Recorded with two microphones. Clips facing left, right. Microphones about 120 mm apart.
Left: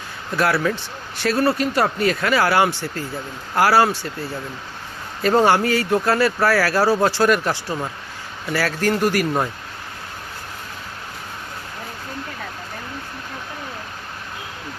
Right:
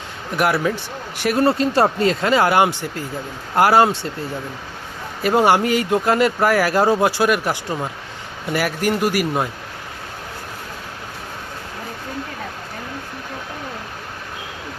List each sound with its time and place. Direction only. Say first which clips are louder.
0.3 s speech: right 1 dB; 15° right (ahead or behind)
5.2 s speech: even; 10° right (ahead or behind)